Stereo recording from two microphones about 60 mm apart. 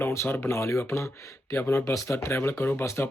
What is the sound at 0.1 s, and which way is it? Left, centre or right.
Speech, left.